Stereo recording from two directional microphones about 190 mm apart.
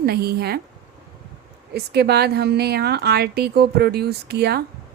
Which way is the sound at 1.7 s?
60° right (ahead or behind).